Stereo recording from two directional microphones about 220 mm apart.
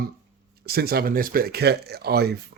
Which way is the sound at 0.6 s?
45° right (ahead or behind).